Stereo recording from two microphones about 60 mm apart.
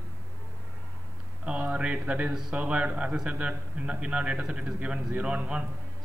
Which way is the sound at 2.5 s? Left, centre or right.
Centre.